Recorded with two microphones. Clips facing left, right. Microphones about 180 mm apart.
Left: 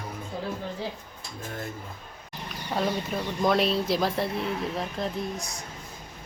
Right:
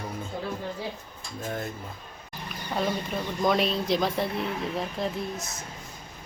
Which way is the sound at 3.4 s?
Centre (ahead or behind).